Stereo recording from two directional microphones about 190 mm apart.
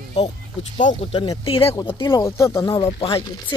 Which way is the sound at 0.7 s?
30° left (ahead or behind).